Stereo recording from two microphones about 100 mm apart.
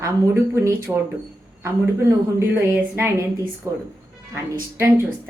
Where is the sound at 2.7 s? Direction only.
20° right (ahead or behind).